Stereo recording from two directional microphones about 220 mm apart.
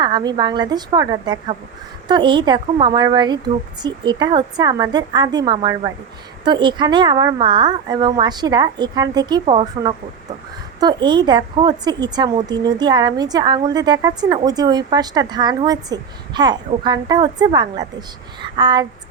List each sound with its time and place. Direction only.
0.0 s a woman's voice: 20° right (ahead or behind)